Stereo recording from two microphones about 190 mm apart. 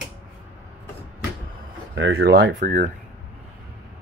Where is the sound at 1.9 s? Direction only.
65° right (ahead or behind).